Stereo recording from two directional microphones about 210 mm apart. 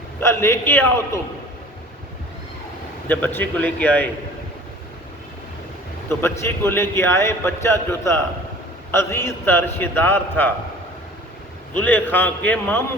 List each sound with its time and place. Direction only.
0.2 s a man's voice: 10° left (ahead or behind)
3.1 s a man's voice: 10° left (ahead or behind)
6.1 s a man's voice: 10° left (ahead or behind)
11.7 s a man's voice: 10° left (ahead or behind)